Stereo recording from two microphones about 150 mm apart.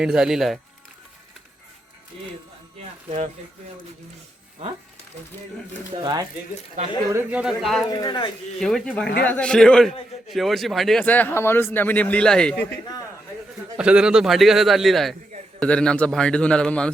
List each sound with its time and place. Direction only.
0.0 s a man's voice: 5° right (ahead or behind)
5.9 s speech: 25° right (ahead or behind)
7.1 s speech: 15° right (ahead or behind)
7.9 s speech: 30° left (ahead or behind)
8.5 s a man's voice: centre (ahead or behind)
13.7 s a man's voice: 5° right (ahead or behind)